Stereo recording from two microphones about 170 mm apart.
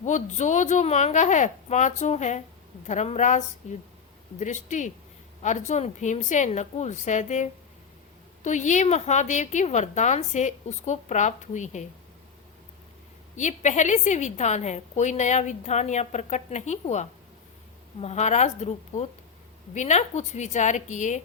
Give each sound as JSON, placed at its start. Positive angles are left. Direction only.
{"t": 0.0, "sound": "a woman's voice", "side_deg": 45}
{"t": 13.3, "sound": "a woman's voice", "side_deg": 45}